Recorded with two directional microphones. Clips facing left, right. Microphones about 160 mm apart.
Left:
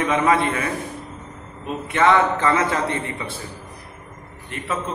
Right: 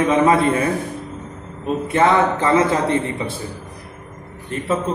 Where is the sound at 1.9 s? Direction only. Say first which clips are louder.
Right 1 dB; 35° right (ahead or behind).